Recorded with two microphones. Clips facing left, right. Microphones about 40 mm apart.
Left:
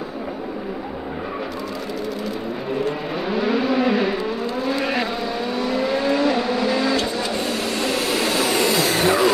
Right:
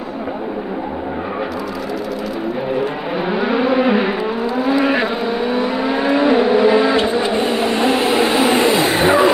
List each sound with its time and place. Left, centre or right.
2.7 s vehicle: centre